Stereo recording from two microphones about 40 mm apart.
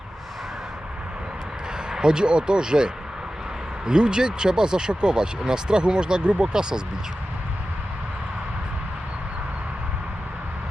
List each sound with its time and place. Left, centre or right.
1.9 s speech: centre